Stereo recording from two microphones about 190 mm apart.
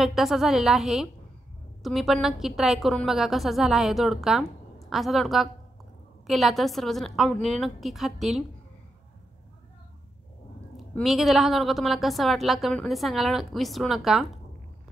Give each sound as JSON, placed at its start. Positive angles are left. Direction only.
{"t": 0.0, "sound": "a woman's voice", "side_deg": 0}
{"t": 10.8, "sound": "a woman's voice", "side_deg": 0}